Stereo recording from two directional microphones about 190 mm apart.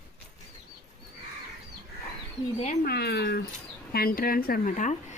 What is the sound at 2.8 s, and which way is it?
Speech, 55° left (ahead or behind).